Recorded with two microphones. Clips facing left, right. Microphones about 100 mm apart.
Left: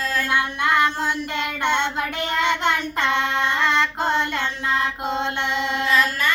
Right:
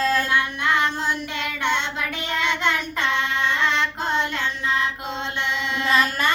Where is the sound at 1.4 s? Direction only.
55° left (ahead or behind).